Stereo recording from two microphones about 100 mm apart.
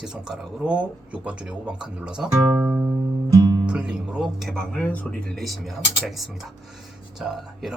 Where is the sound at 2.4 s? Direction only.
25° right (ahead or behind).